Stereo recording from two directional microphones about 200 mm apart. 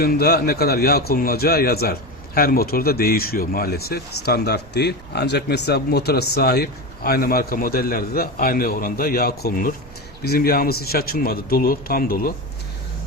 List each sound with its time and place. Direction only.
0.0 s a man's voice: 50° left (ahead or behind)